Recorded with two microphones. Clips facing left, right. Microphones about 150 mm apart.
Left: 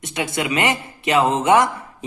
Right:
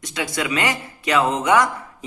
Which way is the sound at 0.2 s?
25° left (ahead or behind).